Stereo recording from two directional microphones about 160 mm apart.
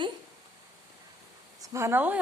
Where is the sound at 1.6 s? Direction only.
20° right (ahead or behind).